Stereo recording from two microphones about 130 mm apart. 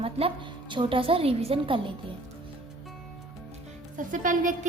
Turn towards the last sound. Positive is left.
turn(degrees=-80)